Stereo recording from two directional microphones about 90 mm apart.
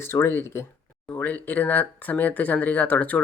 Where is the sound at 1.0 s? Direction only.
20° left (ahead or behind).